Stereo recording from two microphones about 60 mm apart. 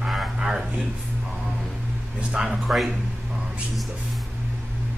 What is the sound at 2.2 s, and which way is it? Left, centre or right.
Speech, centre.